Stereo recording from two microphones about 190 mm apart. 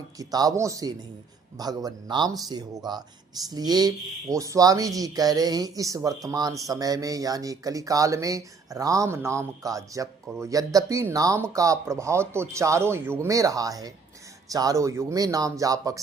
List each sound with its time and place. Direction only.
0.2 s speech: 20° right (ahead or behind)